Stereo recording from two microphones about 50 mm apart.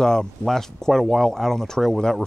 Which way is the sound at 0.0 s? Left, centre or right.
Centre.